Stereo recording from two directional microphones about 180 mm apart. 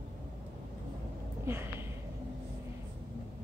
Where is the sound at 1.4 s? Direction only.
15° right (ahead or behind).